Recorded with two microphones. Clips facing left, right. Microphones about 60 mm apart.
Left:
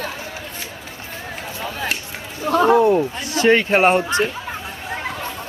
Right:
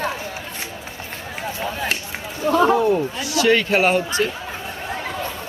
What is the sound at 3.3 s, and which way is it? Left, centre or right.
A man's voice, left.